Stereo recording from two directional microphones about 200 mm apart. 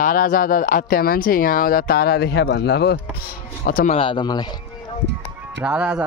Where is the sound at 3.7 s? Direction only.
45° left (ahead or behind).